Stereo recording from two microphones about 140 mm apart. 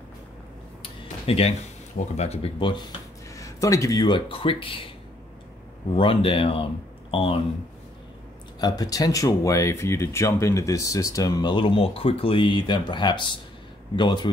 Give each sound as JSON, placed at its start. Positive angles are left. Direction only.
{"t": 0.8, "sound": "a sound", "side_deg": 45}
{"t": 2.0, "sound": "speech", "side_deg": 50}
{"t": 3.3, "sound": "speech", "side_deg": 25}
{"t": 5.9, "sound": "speech", "side_deg": 40}
{"t": 8.5, "sound": "speech", "side_deg": 30}
{"t": 11.5, "sound": "speech", "side_deg": 40}